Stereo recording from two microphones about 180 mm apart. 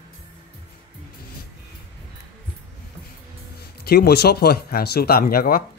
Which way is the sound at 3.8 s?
60° left (ahead or behind).